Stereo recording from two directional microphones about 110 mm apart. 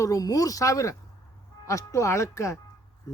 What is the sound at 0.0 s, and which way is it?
A man's voice, 30° left (ahead or behind).